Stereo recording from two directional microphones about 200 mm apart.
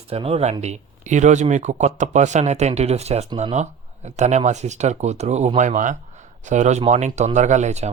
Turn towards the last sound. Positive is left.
turn(degrees=-35)  # may be behind; listen again after turning